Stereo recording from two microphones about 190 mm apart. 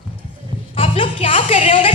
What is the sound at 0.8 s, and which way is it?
Music, 30° left (ahead or behind).